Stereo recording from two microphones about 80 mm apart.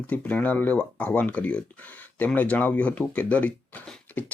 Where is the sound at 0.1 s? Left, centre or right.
Centre.